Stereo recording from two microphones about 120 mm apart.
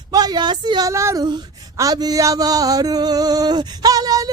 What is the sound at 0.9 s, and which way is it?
Speech, 25° right (ahead or behind).